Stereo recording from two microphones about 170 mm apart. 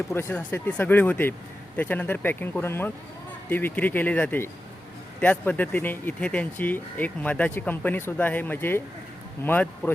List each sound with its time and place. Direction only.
0.1 s speech: 15° left (ahead or behind)